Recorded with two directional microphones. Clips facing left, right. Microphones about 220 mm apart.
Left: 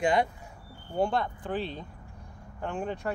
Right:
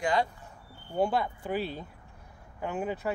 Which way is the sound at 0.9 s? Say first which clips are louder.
Even; 5° right (ahead or behind).